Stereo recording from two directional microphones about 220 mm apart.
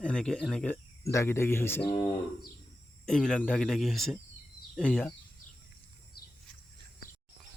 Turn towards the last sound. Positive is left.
turn(degrees=45)  # may be behind; listen again after turning